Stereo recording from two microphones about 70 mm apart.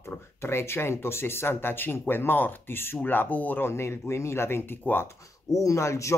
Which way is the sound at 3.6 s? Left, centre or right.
Left.